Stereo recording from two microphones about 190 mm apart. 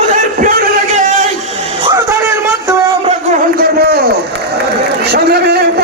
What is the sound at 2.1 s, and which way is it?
Music, 15° right (ahead or behind).